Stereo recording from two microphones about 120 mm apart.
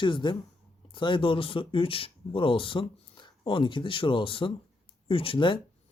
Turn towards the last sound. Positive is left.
turn(degrees=45)  # may be behind; listen again after turning